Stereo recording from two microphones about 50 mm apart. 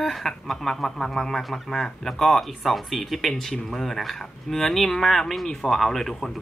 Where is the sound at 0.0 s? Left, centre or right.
Centre.